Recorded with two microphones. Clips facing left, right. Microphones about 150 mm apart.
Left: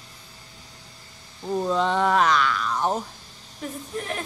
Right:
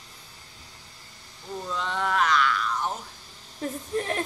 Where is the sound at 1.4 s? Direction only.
45° left (ahead or behind).